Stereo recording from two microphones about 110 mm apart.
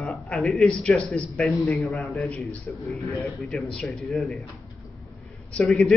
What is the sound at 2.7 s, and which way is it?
Speech, 20° left (ahead or behind).